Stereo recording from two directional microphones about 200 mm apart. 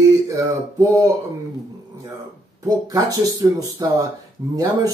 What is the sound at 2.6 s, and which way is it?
Speech, 20° right (ahead or behind).